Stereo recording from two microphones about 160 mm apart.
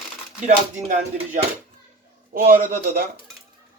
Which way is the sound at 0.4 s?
50° right (ahead or behind).